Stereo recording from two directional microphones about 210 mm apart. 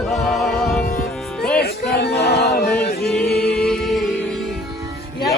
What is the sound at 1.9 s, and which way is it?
Music, 50° left (ahead or behind).